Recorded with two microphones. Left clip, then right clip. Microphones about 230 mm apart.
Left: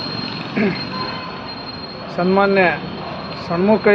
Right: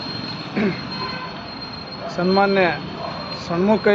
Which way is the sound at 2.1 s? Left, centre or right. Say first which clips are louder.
Left 2 dB; centre.